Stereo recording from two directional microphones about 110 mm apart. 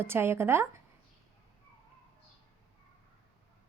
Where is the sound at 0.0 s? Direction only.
20° right (ahead or behind).